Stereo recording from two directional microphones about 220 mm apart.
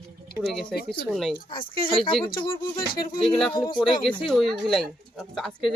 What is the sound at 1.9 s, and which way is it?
Speech, 25° left (ahead or behind).